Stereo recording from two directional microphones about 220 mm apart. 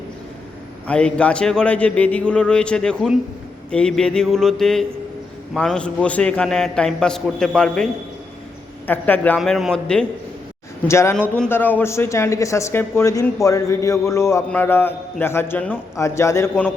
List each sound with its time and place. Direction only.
0.9 s a man's voice: 5° left (ahead or behind)
8.9 s a man's voice: 10° left (ahead or behind)